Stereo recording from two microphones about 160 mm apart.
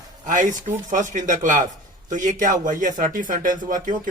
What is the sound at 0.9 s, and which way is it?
Speech, 50° right (ahead or behind).